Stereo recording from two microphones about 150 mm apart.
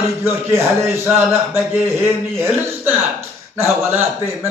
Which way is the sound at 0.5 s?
15° right (ahead or behind).